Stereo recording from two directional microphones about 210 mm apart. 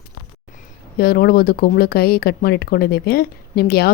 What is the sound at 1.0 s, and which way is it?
Speech, 45° left (ahead or behind).